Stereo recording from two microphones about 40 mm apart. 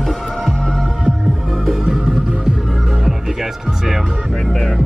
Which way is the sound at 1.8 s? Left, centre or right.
Centre.